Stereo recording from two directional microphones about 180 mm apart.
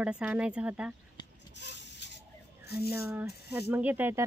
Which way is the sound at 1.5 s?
75° left (ahead or behind).